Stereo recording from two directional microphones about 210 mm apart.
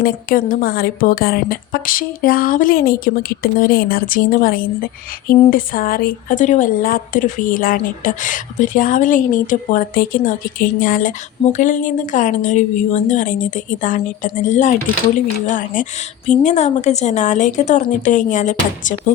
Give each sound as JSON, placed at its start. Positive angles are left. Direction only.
{"t": 0.0, "sound": "a woman's voice", "side_deg": 45}